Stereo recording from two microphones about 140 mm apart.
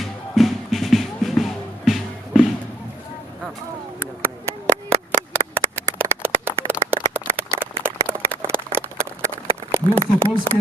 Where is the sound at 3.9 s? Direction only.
20° right (ahead or behind).